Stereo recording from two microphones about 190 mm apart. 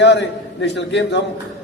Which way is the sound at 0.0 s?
65° left (ahead or behind).